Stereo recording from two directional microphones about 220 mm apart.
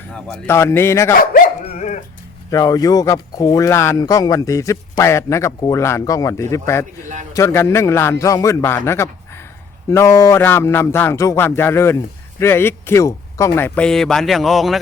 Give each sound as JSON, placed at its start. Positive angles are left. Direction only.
{"t": 0.1, "sound": "speech", "side_deg": 5}
{"t": 1.1, "sound": "dog", "side_deg": 40}
{"t": 2.5, "sound": "speech", "side_deg": 15}